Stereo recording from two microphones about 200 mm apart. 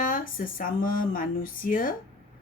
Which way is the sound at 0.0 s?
45° left (ahead or behind).